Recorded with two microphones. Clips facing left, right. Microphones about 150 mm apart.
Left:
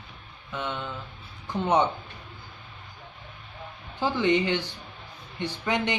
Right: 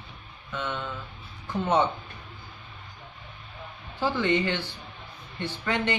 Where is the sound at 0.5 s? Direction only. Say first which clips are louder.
Even; 15° left (ahead or behind).